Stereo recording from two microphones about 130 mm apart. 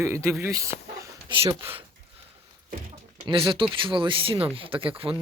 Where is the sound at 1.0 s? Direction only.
40° right (ahead or behind).